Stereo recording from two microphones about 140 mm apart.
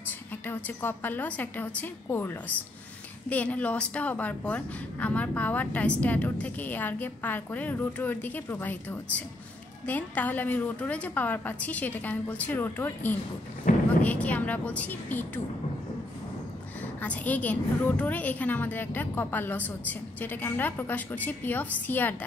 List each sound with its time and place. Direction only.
0.5 s a woman's voice: 15° left (ahead or behind)
13.7 s thunder: 70° left (ahead or behind)
14.0 s a woman's voice: 10° left (ahead or behind)
17.0 s a woman's voice: 10° left (ahead or behind)